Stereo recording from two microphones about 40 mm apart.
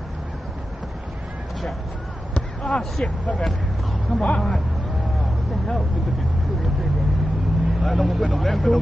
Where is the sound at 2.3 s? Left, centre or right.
Left.